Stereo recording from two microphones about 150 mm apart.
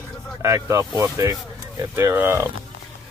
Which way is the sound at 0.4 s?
20° right (ahead or behind).